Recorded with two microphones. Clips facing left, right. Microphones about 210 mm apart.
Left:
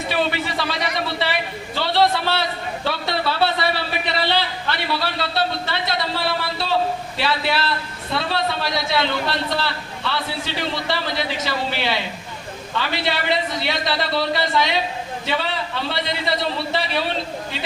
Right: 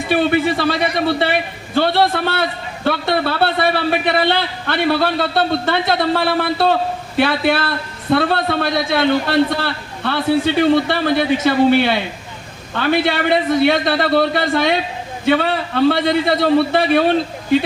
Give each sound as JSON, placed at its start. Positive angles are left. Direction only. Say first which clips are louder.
{"t": 0.1, "sound": "a man's voice", "louder": "right 9 dB", "side_deg": -55}